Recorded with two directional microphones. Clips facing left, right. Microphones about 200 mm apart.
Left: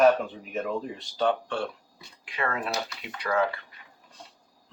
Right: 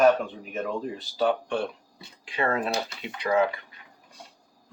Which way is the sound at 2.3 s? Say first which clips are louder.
Right 4 dB; 30° right (ahead or behind).